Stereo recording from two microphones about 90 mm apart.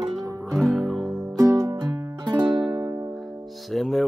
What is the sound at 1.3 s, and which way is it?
Music, 35° right (ahead or behind).